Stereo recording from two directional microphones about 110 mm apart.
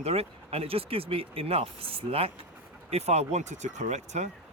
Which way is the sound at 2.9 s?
80° right.